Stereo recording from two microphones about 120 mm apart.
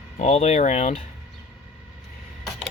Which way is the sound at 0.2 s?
70° left (ahead or behind).